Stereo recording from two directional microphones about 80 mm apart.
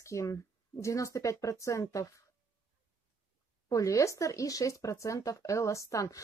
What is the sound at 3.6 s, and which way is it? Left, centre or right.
Speech, left.